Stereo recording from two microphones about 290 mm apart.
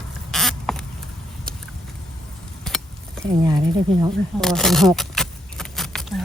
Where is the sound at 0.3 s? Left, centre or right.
Centre.